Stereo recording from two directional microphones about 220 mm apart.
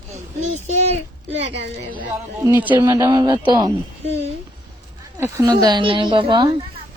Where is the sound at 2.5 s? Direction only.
10° right (ahead or behind).